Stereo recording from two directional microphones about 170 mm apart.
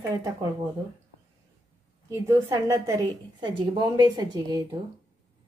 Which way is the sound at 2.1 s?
20° right (ahead or behind).